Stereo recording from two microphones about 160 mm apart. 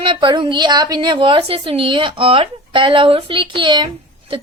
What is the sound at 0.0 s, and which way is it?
A woman's voice, 30° right (ahead or behind).